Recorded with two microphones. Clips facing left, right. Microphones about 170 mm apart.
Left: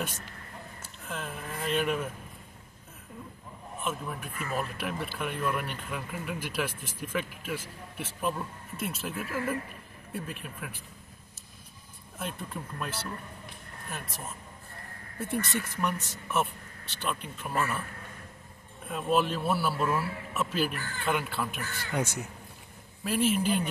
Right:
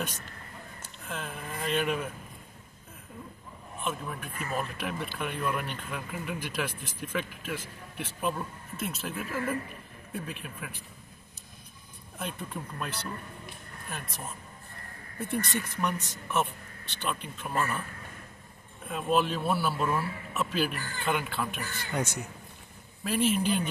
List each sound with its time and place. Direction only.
0.8 s speech: centre (ahead or behind)
3.8 s speech: 5° left (ahead or behind)
12.2 s speech: centre (ahead or behind)
18.9 s speech: centre (ahead or behind)